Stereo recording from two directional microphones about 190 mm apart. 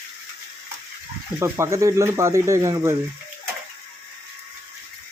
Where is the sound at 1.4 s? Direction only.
15° right (ahead or behind).